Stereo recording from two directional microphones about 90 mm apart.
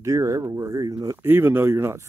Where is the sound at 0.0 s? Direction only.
35° right (ahead or behind).